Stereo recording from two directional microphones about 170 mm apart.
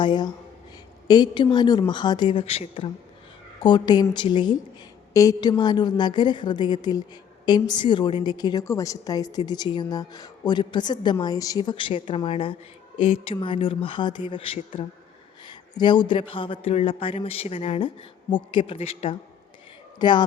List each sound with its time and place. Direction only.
0.0 s a woman's voice: 25° left (ahead or behind)